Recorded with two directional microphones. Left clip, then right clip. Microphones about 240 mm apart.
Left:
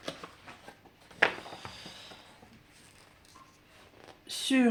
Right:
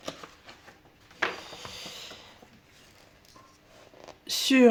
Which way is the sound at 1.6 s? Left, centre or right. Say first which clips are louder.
Right 5 dB; right.